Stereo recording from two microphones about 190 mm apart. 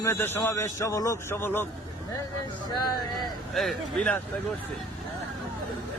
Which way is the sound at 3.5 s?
Centre (ahead or behind).